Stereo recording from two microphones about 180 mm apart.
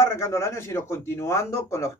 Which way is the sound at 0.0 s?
15° left (ahead or behind).